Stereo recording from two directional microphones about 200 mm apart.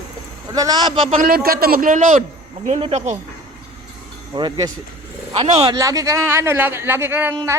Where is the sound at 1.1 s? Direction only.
45° right (ahead or behind).